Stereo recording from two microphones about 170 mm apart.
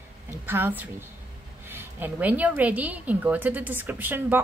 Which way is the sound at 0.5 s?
10° right (ahead or behind).